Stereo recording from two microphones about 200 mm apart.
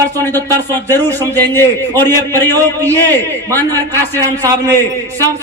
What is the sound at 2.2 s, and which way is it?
Speech, 15° right (ahead or behind).